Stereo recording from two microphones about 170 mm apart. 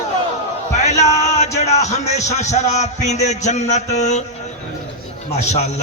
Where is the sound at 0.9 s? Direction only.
40° left (ahead or behind).